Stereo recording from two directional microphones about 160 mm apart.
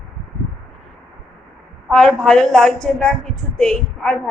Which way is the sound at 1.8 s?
5° left (ahead or behind).